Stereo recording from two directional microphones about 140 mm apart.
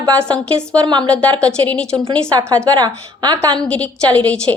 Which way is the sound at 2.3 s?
25° right (ahead or behind).